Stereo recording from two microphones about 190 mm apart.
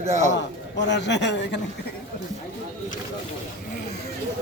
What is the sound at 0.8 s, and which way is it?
Speech, 65° left (ahead or behind).